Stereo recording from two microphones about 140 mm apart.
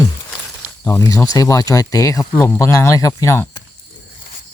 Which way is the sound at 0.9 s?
20° left (ahead or behind).